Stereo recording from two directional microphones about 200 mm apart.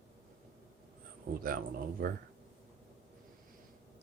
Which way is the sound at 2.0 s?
45° right (ahead or behind).